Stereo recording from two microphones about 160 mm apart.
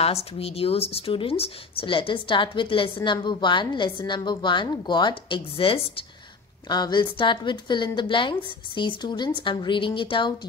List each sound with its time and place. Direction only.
0.0 s a woman's voice: 40° left (ahead or behind)